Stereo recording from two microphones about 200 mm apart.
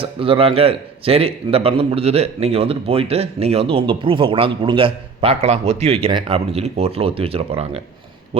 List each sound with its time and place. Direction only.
0.0 s speech: 25° right (ahead or behind)